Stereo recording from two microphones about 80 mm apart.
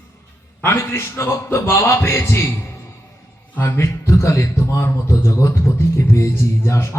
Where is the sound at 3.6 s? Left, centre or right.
Left.